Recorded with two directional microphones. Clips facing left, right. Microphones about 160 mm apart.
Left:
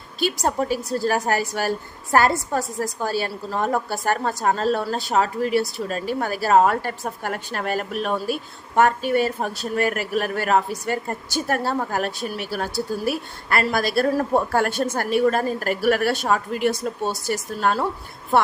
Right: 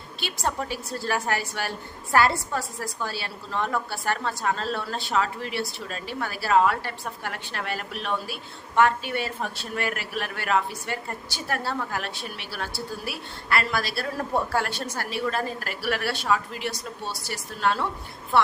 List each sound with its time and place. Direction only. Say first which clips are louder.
0.2 s a woman's voice: left 7 dB; 40° left (ahead or behind)